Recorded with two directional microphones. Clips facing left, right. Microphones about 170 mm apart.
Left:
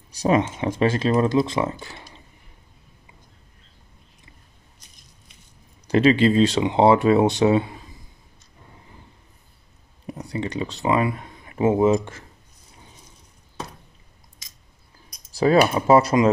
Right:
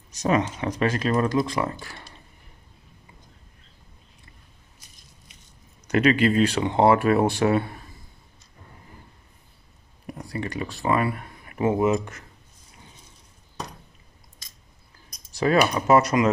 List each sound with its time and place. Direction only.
0.1 s speech: 30° left (ahead or behind)
5.9 s speech: 30° left (ahead or behind)
10.1 s speech: 20° left (ahead or behind)
15.3 s speech: 30° left (ahead or behind)